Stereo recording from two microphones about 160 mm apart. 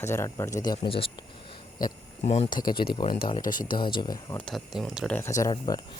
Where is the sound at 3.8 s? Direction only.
30° left (ahead or behind).